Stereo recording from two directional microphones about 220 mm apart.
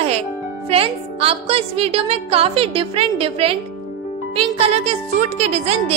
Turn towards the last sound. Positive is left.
turn(degrees=-30)  # may be behind; listen again after turning